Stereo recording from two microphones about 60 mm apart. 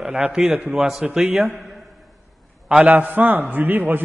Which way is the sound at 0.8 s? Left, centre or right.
Centre.